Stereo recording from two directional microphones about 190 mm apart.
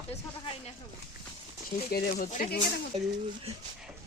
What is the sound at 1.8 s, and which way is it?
Speech, 50° left (ahead or behind).